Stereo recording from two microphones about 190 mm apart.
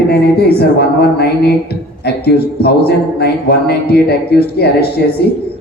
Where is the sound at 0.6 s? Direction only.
55° left (ahead or behind).